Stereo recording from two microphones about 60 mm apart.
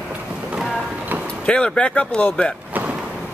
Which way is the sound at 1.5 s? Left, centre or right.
Centre.